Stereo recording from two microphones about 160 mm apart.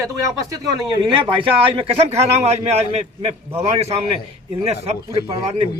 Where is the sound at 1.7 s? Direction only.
40° right (ahead or behind).